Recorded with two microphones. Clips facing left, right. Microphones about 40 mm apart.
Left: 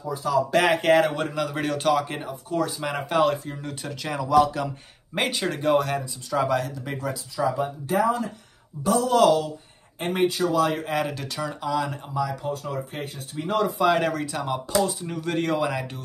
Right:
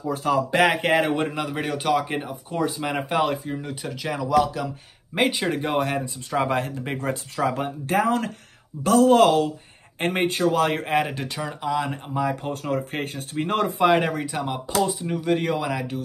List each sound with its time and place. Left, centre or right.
0.0 s speech: right
0.5 s speech: centre
1.5 s speech: centre; by 7.2 s right
7.3 s speech: right
11.1 s speech: right
11.8 s speech: right
13.8 s speech: right; by 16.0 s centre